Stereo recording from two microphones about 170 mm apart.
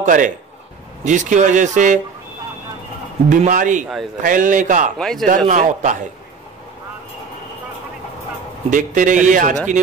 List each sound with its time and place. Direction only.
0.0 s a man's voice: 50° right (ahead or behind)
3.3 s speech: 50° right (ahead or behind)
3.8 s a man's voice: centre (ahead or behind)
4.2 s speech: 50° right (ahead or behind)
4.9 s a man's voice: centre (ahead or behind)
5.5 s speech: 45° right (ahead or behind)
8.6 s speech: 50° right (ahead or behind)